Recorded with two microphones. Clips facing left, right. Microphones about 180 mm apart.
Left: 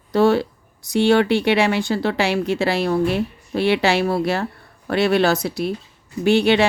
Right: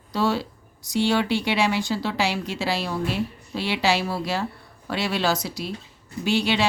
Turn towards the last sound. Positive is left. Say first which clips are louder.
# left 7 dB
turn(degrees=60)  # may be behind; listen again after turning